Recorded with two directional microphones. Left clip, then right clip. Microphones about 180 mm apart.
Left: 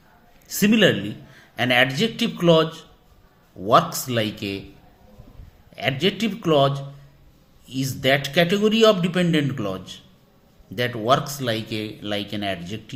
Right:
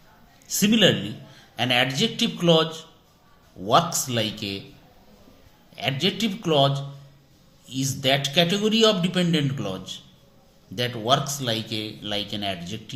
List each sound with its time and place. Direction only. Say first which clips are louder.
0.4 s a man's voice: left 1 dB; 45° left (ahead or behind)
5.7 s a man's voice: left 2 dB; 45° left (ahead or behind)